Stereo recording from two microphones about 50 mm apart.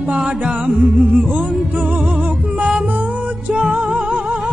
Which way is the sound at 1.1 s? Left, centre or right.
Right.